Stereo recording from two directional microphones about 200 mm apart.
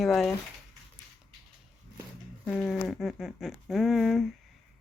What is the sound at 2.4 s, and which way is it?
Speech, centre (ahead or behind).